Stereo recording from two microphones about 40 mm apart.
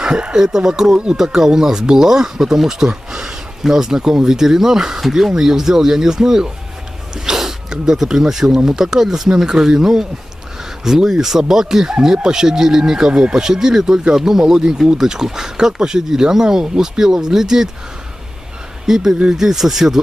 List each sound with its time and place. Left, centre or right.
0.0 s speech: centre
18.9 s speech: centre